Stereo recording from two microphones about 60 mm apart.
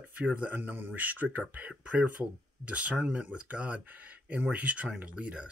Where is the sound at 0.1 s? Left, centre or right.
Right.